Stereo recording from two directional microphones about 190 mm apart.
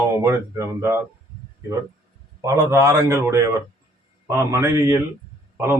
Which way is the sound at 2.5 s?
15° right (ahead or behind).